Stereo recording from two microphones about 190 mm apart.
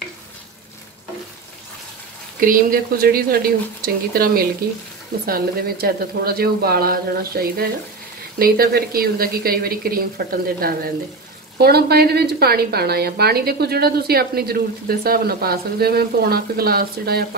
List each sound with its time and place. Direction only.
2.4 s a woman's voice: 50° right (ahead or behind)